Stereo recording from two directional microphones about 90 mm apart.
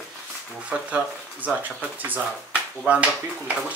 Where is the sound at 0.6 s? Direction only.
15° right (ahead or behind).